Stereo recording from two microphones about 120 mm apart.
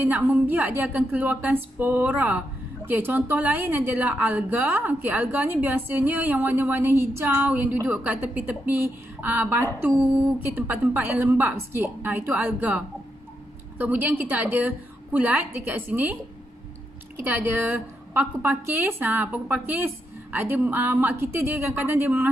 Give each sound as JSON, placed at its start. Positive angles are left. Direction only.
{"t": 0.0, "sound": "a woman's voice", "side_deg": -15}
{"t": 17.2, "sound": "a woman's voice", "side_deg": -15}